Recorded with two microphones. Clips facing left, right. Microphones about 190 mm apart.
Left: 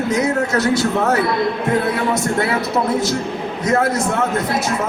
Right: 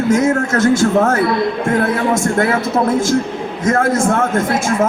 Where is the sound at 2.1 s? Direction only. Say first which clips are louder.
Right 3 dB; 50° right (ahead or behind).